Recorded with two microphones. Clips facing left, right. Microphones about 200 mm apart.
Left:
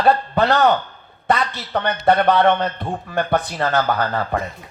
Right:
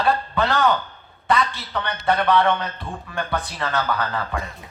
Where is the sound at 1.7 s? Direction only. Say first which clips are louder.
Left 6 dB; 55° left (ahead or behind).